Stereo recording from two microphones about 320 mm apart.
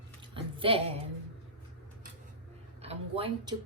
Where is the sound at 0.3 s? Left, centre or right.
Centre.